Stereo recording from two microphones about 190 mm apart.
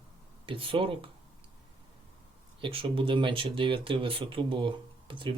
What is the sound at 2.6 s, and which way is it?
Speech, 30° right (ahead or behind).